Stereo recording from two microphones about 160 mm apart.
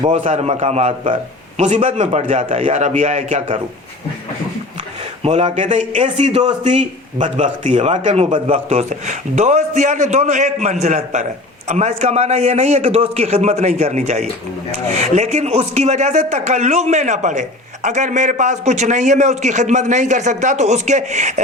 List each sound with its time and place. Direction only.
0.2 s a man's voice: 50° right (ahead or behind)
1.6 s a man's voice: 50° right (ahead or behind)
5.2 s a man's voice: 45° right (ahead or behind)